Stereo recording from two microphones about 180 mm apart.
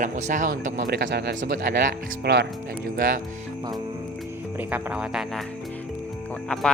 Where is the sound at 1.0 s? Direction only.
65° right (ahead or behind).